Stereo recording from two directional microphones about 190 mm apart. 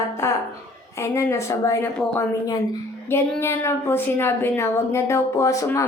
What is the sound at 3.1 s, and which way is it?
A woman's voice, 15° left (ahead or behind).